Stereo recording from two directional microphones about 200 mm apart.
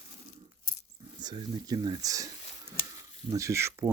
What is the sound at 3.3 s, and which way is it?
Speech, 15° right (ahead or behind).